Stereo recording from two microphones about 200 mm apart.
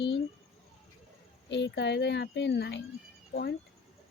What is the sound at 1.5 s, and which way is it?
Speech, 60° left (ahead or behind).